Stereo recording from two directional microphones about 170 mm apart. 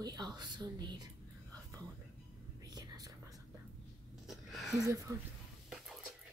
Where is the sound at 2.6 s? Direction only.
25° right (ahead or behind).